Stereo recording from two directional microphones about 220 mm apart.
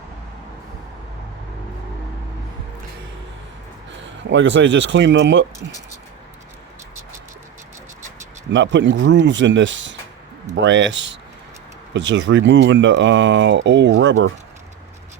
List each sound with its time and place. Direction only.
4.0 s speech: 55° right (ahead or behind)
8.5 s speech: 55° right (ahead or behind)